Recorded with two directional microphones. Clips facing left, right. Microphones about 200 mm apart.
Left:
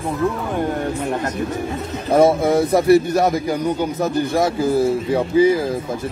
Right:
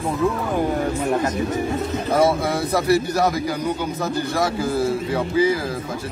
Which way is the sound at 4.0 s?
20° left (ahead or behind).